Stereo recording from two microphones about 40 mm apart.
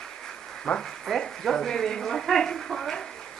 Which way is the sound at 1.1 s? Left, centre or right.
Centre.